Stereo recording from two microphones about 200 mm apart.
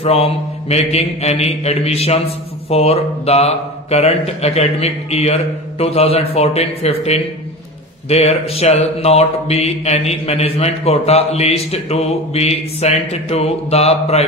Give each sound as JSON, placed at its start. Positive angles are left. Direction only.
{"t": 0.0, "sound": "mantra", "side_deg": 30}